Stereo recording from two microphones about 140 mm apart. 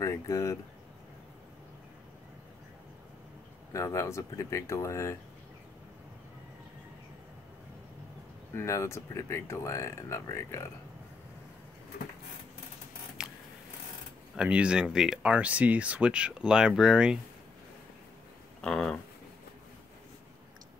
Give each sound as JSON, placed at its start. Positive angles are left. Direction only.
{"t": 0.0, "sound": "speech", "side_deg": 20}
{"t": 3.7, "sound": "speech", "side_deg": 20}
{"t": 8.5, "sound": "speech", "side_deg": 20}
{"t": 14.3, "sound": "speech", "side_deg": -5}
{"t": 18.6, "sound": "speech", "side_deg": 5}